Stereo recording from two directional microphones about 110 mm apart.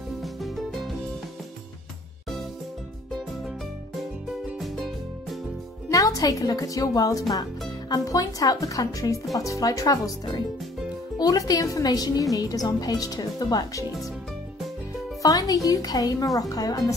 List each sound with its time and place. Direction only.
0.2 s music: centre (ahead or behind)
4.6 s music: centre (ahead or behind)
5.9 s a woman's voice: 30° left (ahead or behind)
15.2 s a woman's voice: 35° left (ahead or behind)